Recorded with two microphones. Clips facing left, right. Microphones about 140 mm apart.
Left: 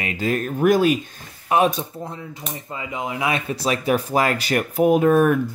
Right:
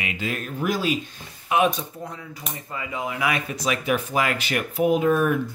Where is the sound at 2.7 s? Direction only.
20° left (ahead or behind); by 5.3 s 50° left (ahead or behind).